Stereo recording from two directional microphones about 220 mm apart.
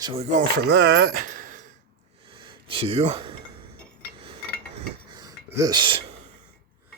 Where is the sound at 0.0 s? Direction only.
25° right (ahead or behind).